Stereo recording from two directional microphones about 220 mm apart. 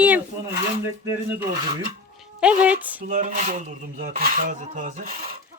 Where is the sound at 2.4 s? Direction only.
5° right (ahead or behind).